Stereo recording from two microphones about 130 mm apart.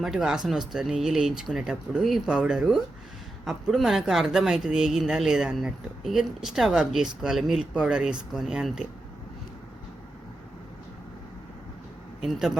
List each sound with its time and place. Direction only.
0.0 s speech: 5° right (ahead or behind)
12.2 s speech: 5° right (ahead or behind)